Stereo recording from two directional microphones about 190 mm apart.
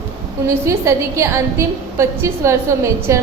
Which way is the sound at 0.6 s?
15° right (ahead or behind).